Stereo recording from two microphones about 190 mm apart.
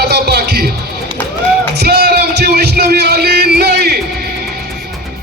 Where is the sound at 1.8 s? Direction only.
55° right (ahead or behind).